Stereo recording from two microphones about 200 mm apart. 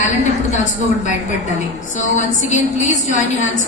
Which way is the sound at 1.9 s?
35° left (ahead or behind).